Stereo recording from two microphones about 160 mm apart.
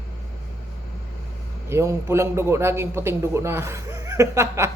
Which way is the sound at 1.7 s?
15° right (ahead or behind).